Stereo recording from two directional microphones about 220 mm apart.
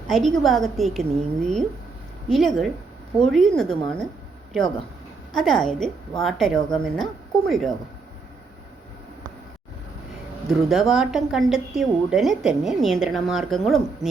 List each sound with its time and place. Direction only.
0.1 s a woman's voice: centre (ahead or behind)
5.3 s a woman's voice: centre (ahead or behind)
10.7 s a woman's voice: centre (ahead or behind)